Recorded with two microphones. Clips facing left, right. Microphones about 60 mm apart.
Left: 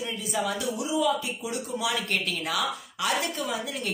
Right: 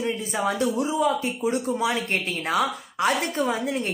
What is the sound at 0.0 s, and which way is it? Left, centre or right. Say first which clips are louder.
Speech: right 4 dB; right.